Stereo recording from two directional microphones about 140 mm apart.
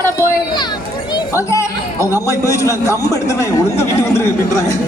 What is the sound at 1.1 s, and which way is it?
Chatter, 20° left (ahead or behind).